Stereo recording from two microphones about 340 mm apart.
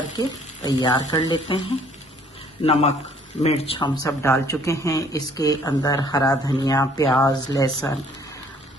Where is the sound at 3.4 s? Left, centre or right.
Centre.